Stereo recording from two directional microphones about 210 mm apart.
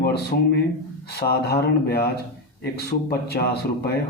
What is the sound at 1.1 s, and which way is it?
Speech, 50° left (ahead or behind).